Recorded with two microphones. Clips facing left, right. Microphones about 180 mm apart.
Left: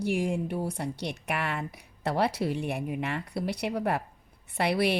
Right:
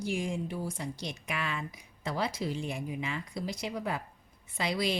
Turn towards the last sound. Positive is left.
turn(degrees=65)  # may be behind; listen again after turning